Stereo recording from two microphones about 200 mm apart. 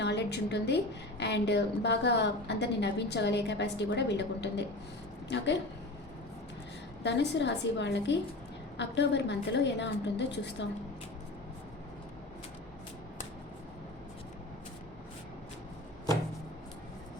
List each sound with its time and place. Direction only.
0.0 s a sound: 60° left (ahead or behind)
1.2 s a woman's voice: 60° left (ahead or behind)
7.0 s a woman's voice: 60° left (ahead or behind)